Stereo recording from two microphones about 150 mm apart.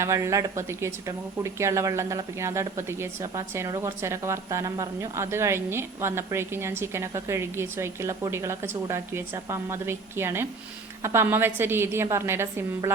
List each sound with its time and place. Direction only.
0.0 s speech: 20° right (ahead or behind)